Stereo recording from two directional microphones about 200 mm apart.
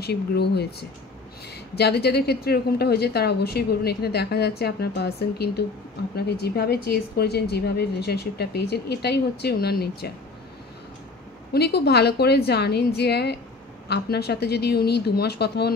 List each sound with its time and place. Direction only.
0.0 s a woman's voice: 55° left (ahead or behind)
11.5 s a woman's voice: 55° left (ahead or behind)